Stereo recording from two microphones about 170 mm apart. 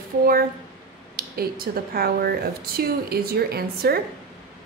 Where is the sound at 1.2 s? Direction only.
60° right (ahead or behind).